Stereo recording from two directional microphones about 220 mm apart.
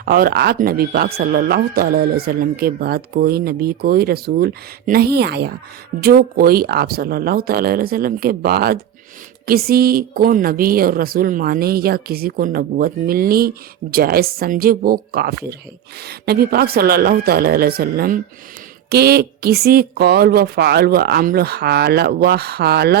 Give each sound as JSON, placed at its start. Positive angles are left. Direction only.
{"t": 0.0, "sound": "speech", "side_deg": -45}